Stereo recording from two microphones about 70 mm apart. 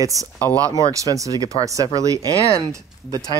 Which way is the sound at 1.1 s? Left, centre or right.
Right.